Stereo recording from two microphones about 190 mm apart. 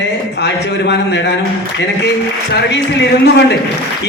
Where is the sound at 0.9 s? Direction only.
65° left (ahead or behind).